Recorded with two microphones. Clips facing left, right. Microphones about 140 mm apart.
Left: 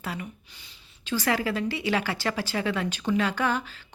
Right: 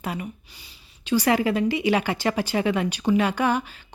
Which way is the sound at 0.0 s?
15° right (ahead or behind).